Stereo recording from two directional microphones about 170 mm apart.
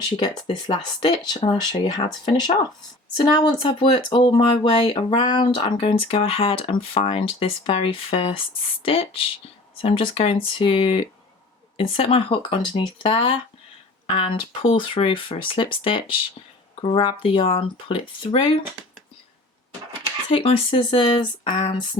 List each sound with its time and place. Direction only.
0.2 s speech: 25° left (ahead or behind)
20.3 s speech: 35° left (ahead or behind)